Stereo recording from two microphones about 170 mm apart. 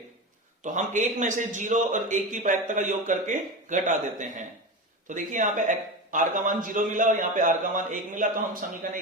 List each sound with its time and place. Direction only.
0.6 s a man's voice: 45° right (ahead or behind)